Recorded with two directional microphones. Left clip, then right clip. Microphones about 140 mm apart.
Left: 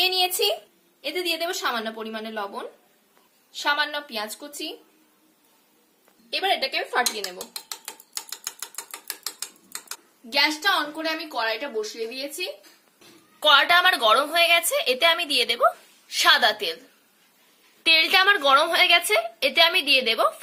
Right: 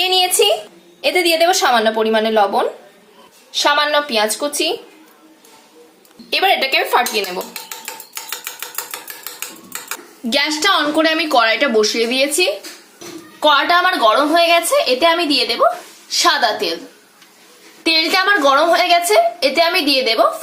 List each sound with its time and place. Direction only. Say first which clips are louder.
0.0 s a sound: right 8 dB; 5° right (ahead or behind)
1.0 s speech: right 13 dB; 10° right (ahead or behind)
6.3 s a woman's voice: right 10 dB; 5° right (ahead or behind)
10.2 s a woman's voice: right 6 dB; 20° right (ahead or behind)
13.4 s a woman's voice: right 4 dB; 15° left (ahead or behind)
17.8 s a woman's voice: right 3 dB; 15° left (ahead or behind)